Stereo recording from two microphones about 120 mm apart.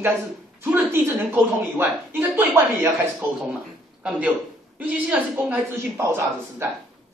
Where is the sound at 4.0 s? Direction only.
10° right (ahead or behind).